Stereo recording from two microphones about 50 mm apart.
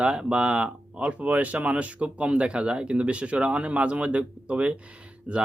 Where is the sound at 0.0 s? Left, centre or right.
Centre.